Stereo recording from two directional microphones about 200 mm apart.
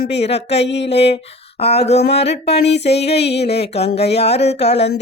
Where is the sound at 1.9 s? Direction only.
55° left (ahead or behind).